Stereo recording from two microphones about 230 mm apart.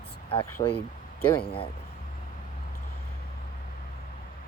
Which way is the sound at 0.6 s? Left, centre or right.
Left.